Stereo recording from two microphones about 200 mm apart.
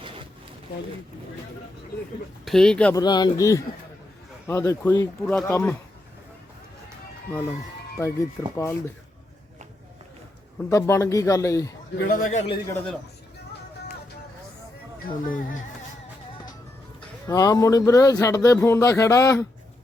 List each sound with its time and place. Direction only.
2.4 s speech: centre (ahead or behind)
2.9 s speech: 20° left (ahead or behind)
5.2 s speech: centre (ahead or behind)
5.5 s speech: 10° left (ahead or behind)
7.9 s speech: 15° left (ahead or behind)
10.7 s speech: 15° left (ahead or behind)
12.1 s a man's voice: 40° left (ahead or behind)
12.5 s speech: 15° left (ahead or behind)
14.9 s speech: 45° left (ahead or behind)
17.2 s speech: 20° left (ahead or behind)